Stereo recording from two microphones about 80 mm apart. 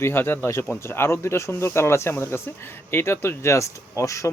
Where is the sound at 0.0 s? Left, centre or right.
Left.